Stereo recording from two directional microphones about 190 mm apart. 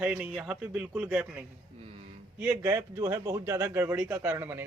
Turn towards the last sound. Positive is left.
turn(degrees=-10)  # may be behind; listen again after turning